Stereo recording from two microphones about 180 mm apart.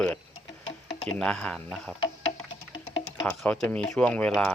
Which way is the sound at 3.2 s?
5° left (ahead or behind).